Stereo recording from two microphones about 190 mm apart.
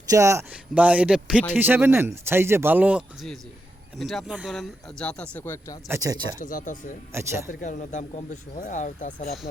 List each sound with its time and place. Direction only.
0.1 s a man's voice: 15° right (ahead or behind); by 5.8 s 15° left (ahead or behind)
5.9 s a man's voice: 20° right (ahead or behind)
6.4 s speech: 45° left (ahead or behind)
7.1 s a man's voice: 15° right (ahead or behind)
7.4 s speech: 45° left (ahead or behind)